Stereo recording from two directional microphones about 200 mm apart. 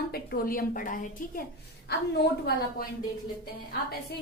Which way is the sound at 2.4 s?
50° left (ahead or behind).